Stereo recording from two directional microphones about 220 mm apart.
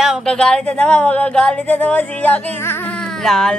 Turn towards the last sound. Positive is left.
turn(degrees=0)  # may be behind; listen again after turning